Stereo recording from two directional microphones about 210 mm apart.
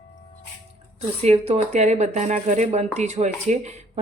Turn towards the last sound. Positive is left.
turn(degrees=-35)  # may be behind; listen again after turning